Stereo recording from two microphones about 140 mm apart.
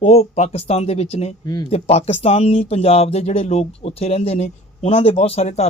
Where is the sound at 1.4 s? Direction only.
30° left (ahead or behind).